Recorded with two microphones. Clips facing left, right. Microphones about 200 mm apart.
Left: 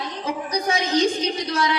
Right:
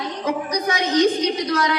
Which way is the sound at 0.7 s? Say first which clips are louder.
Right 3 dB; 30° left (ahead or behind).